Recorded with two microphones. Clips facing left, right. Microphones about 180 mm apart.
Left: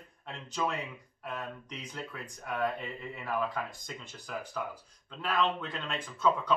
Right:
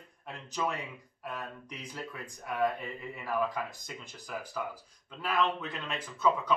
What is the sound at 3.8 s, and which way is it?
Speech, 5° right (ahead or behind).